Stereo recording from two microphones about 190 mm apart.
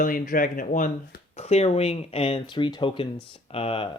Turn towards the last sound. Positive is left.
turn(degrees=30)  # may be behind; listen again after turning